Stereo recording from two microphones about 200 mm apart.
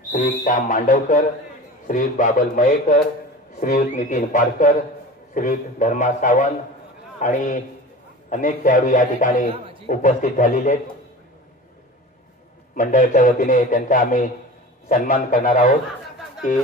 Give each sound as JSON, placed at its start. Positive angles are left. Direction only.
{"t": 0.1, "sound": "a man's voice", "side_deg": 40}
{"t": 12.7, "sound": "a man's voice", "side_deg": 40}